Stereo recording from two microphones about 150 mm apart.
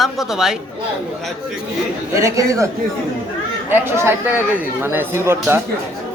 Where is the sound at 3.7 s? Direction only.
15° right (ahead or behind).